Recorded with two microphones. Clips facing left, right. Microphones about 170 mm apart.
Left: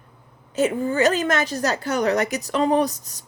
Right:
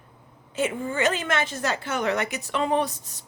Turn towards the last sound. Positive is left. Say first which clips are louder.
# left 4 dB
turn(degrees=40)  # may be behind; listen again after turning